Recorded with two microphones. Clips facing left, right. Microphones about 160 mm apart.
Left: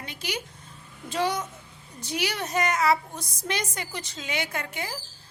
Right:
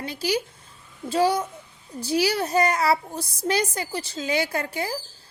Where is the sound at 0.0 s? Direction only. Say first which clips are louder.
Right 8 dB; 35° right (ahead or behind).